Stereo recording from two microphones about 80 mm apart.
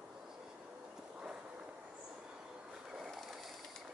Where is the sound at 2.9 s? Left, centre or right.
Centre.